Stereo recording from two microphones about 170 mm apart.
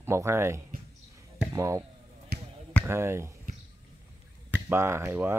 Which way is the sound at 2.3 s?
75° right (ahead or behind).